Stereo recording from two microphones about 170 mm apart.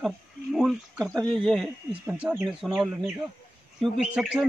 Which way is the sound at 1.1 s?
25° right (ahead or behind).